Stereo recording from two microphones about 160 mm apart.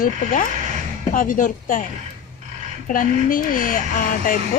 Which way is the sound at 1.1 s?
60° left (ahead or behind).